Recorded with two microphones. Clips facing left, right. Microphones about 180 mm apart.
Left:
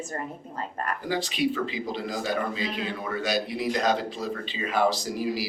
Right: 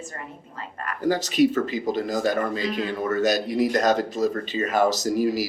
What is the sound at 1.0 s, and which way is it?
A man's voice, 45° right (ahead or behind).